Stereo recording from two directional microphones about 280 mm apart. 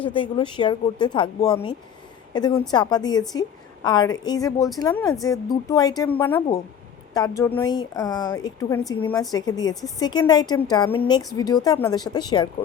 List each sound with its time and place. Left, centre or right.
0.0 s a woman's voice: centre